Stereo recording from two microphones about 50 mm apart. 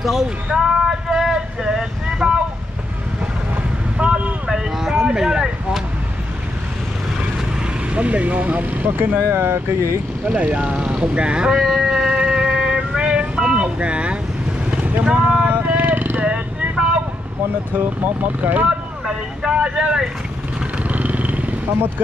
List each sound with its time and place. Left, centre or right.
0.0 s vehicle: centre
4.0 s vehicle: right
4.5 s speech: centre
7.9 s speech: right
10.2 s speech: right
11.6 s vehicle: centre
13.7 s speech: right
15.0 s vehicle: right
15.9 s vehicle: right
17.7 s speech: right
19.0 s speech: centre
20.8 s vehicle: right